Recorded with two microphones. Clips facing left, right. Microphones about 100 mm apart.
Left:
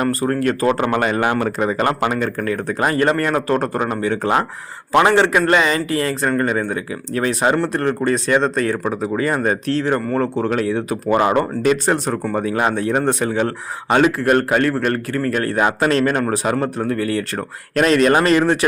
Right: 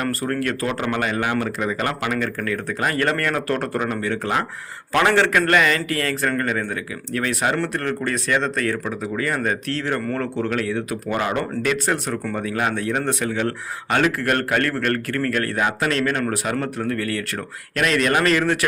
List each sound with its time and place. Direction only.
0.0 s speech: 25° left (ahead or behind)
13.9 s speech: 20° left (ahead or behind)